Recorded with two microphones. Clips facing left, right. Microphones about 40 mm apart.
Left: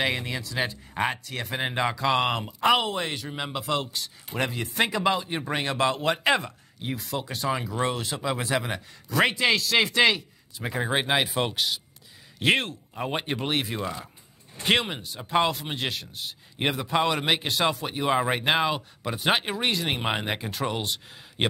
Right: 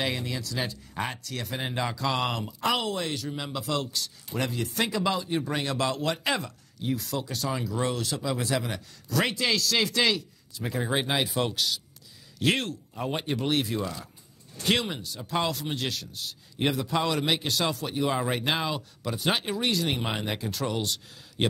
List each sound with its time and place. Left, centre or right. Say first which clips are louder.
0.0 s speech: left 3 dB; left